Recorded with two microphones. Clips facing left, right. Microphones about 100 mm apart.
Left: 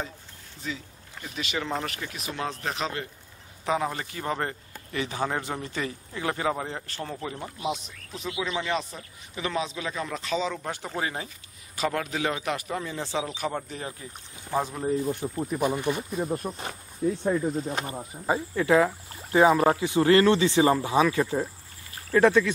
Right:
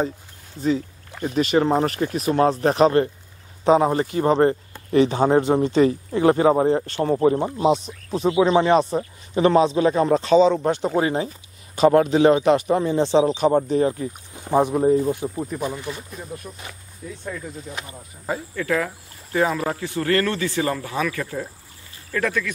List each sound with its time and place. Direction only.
0.6 s speech: 40° right (ahead or behind)
3.6 s speech: 30° right (ahead or behind)
14.5 s speech: 20° right (ahead or behind)
15.1 s speech: 10° right (ahead or behind)
15.5 s speech: 10° left (ahead or behind)
16.2 s speech: 40° left (ahead or behind)
18.3 s speech: 20° left (ahead or behind)